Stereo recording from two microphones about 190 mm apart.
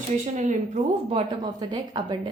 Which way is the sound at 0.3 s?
40° right (ahead or behind).